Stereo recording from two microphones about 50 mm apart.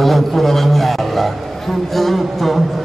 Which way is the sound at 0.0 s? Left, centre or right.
Centre.